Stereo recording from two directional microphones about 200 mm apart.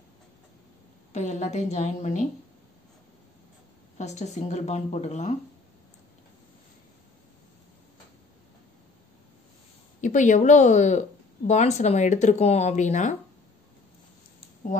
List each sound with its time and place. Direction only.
1.1 s a woman's voice: 35° left (ahead or behind)
4.0 s a woman's voice: 35° left (ahead or behind)
10.0 s a woman's voice: 40° left (ahead or behind)